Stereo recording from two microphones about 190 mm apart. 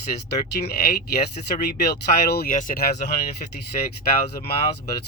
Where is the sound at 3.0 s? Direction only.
35° left (ahead or behind).